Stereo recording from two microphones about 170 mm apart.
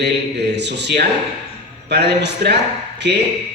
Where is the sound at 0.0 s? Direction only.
85° right.